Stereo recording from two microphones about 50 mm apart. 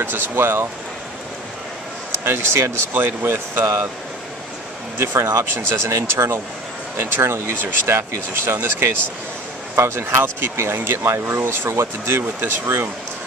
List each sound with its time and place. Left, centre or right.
0.0 s speech: right
2.2 s speech: right
4.9 s speech: right
7.0 s speech: right
9.8 s speech: right